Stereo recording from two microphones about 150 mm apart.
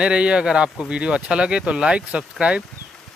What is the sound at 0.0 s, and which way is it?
Speech, 5° right (ahead or behind).